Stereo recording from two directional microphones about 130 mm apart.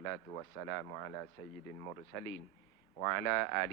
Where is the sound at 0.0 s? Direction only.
25° left (ahead or behind).